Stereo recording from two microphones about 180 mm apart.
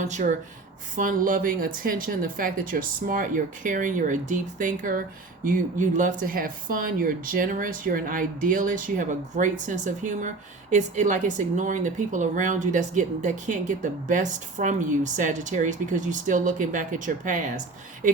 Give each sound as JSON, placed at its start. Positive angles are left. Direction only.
{"t": 0.0, "sound": "speech", "side_deg": -40}